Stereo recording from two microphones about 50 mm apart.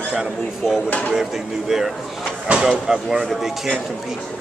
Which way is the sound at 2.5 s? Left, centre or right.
Centre.